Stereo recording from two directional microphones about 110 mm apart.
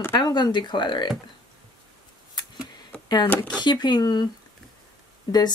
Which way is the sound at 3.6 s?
40° left (ahead or behind).